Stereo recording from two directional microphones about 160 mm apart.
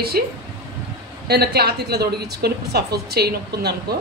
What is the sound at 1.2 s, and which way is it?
A woman's voice, 85° right.